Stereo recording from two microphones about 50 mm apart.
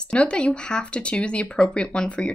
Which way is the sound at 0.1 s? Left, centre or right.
Left.